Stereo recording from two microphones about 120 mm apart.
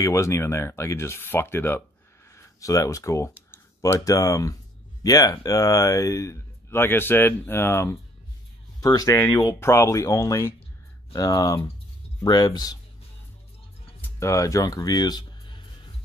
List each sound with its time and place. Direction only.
0.0 s speech: 25° left (ahead or behind)
14.0 s speech: 25° left (ahead or behind)